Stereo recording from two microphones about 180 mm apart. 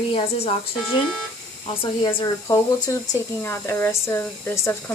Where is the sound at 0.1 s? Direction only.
30° left (ahead or behind).